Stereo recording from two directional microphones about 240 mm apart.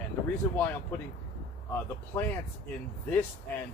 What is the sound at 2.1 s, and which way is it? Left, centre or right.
Speech, centre.